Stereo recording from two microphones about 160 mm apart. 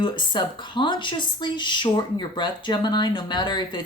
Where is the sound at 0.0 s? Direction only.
30° left (ahead or behind).